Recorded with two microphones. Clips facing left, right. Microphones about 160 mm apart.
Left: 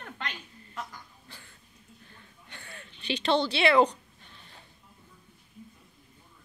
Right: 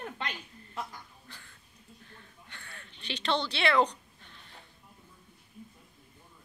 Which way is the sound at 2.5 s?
20° left (ahead or behind).